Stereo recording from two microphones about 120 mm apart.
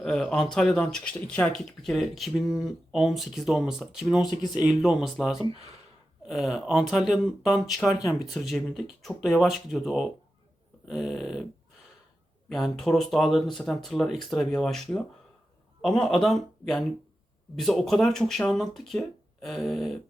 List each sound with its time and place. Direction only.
0.0 s speech: 5° left (ahead or behind)
7.9 s speech: 30° left (ahead or behind)
8.3 s speech: centre (ahead or behind)
12.5 s speech: centre (ahead or behind)